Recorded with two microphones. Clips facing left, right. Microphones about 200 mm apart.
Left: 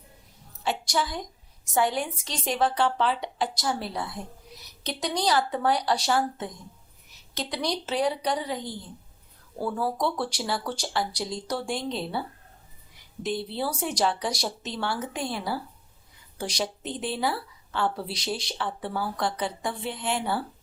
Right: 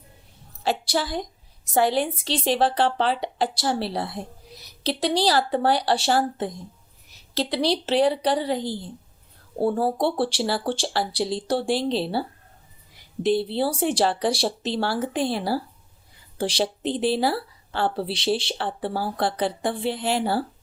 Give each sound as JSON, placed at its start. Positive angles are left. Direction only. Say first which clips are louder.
{"t": 0.6, "sound": "a woman's voice", "louder": "right 3 dB", "side_deg": -35}
{"t": 13.2, "sound": "a woman's voice", "louder": "right 7 dB", "side_deg": -30}